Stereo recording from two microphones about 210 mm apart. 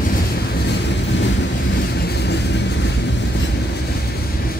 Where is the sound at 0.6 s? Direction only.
55° left (ahead or behind).